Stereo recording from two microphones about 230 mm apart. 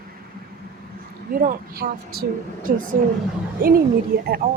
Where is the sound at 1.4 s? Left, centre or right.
Right.